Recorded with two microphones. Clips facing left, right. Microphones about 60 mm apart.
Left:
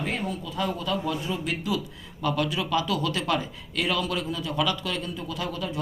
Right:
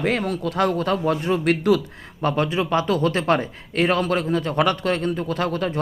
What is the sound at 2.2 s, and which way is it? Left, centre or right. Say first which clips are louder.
A man's voice: right 5 dB; right.